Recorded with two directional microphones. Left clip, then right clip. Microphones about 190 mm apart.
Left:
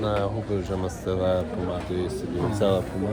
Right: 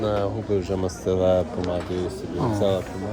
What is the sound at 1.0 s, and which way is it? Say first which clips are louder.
Speech: right 5 dB; 30° right (ahead or behind).